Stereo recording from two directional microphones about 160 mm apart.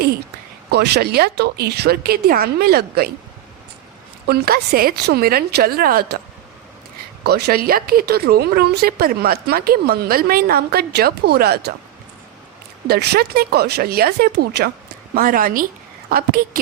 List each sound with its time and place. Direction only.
0.7 s a woman's voice: 90° right
4.3 s speech: 70° right (ahead or behind)
7.3 s speech: 90° right
12.9 s speech: 85° right
15.1 s a woman's voice: 60° right (ahead or behind)